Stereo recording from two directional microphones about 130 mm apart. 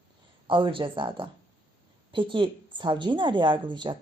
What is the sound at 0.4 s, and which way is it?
Speech, 40° right (ahead or behind).